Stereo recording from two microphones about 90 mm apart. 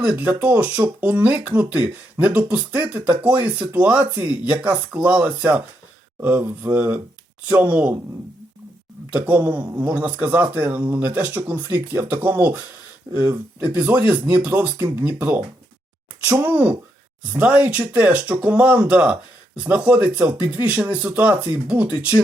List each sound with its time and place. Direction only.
0.0 s speech: 15° right (ahead or behind)
9.1 s speech: 15° right (ahead or behind)
16.5 s speech: 15° right (ahead or behind)